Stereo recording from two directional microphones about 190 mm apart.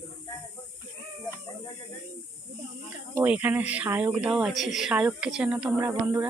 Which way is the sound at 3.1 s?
10° right (ahead or behind).